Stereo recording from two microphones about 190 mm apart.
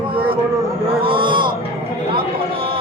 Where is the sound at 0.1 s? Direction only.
30° right (ahead or behind).